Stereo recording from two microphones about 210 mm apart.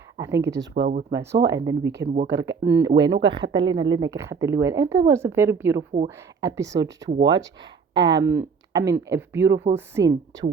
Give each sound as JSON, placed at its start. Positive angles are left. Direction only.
{"t": 0.2, "sound": "speech", "side_deg": -15}
{"t": 0.7, "sound": "speech", "side_deg": -45}
{"t": 1.2, "sound": "speech", "side_deg": -55}
{"t": 1.5, "sound": "speech", "side_deg": -15}
{"t": 2.2, "sound": "speech", "side_deg": -55}
{"t": 2.5, "sound": "speech", "side_deg": -15}